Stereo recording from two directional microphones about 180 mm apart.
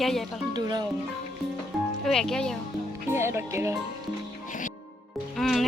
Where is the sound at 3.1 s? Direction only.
15° right (ahead or behind).